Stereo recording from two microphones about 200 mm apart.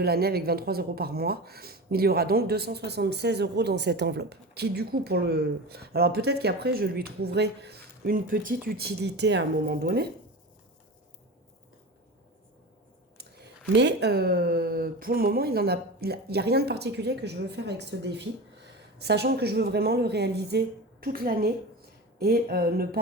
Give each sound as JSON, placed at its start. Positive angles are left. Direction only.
{"t": 0.0, "sound": "speech", "side_deg": -50}
{"t": 13.7, "sound": "speech", "side_deg": -60}